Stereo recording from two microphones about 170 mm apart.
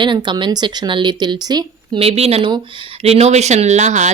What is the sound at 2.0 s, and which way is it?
Speech, 35° right (ahead or behind).